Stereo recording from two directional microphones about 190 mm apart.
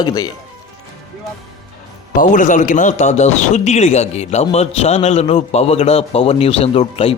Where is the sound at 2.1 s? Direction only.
45° left (ahead or behind).